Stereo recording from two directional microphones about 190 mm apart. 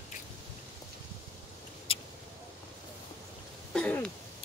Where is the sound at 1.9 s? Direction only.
30° left (ahead or behind).